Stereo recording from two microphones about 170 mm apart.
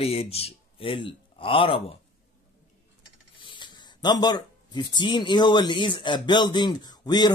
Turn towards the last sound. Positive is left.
turn(degrees=25)  # may be behind; listen again after turning